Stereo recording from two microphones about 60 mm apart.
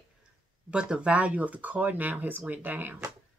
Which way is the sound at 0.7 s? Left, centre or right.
Centre.